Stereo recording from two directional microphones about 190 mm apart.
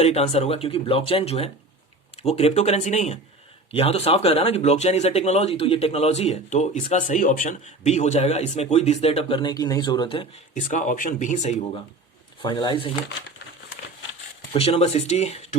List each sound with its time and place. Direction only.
0.0 s speech: 35° left (ahead or behind)
10.7 s speech: 40° left (ahead or behind)
12.4 s speech: 25° left (ahead or behind)
14.5 s speech: 30° left (ahead or behind)